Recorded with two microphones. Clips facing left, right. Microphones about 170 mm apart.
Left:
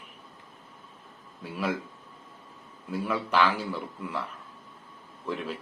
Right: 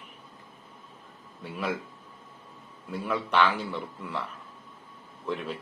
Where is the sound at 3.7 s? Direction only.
10° left (ahead or behind).